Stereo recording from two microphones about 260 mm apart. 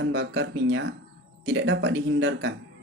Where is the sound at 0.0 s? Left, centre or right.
Right.